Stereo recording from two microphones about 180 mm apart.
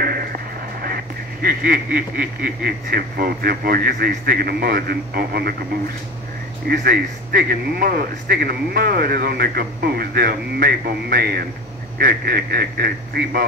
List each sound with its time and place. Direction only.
0.0 s a sound: 55° right (ahead or behind)
0.8 s speech: 55° right (ahead or behind)
6.7 s speech: 55° right (ahead or behind)